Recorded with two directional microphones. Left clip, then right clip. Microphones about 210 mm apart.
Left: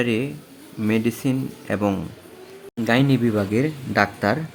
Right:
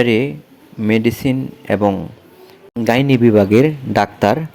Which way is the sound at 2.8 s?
25° right (ahead or behind).